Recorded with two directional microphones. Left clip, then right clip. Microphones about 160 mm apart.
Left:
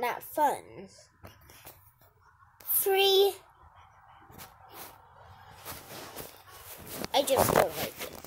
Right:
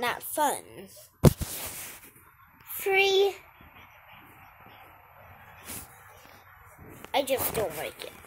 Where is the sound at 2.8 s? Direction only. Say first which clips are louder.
Right 1 dB; 10° left (ahead or behind).